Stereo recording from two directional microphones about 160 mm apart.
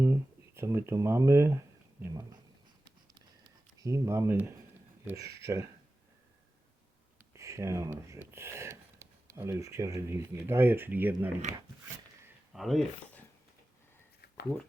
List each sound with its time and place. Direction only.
0.0 s speech: 15° right (ahead or behind)
2.8 s a sound: 30° right (ahead or behind)
5.0 s speech: 20° right (ahead or behind)
7.3 s speech: 20° right (ahead or behind)
12.5 s speech: centre (ahead or behind)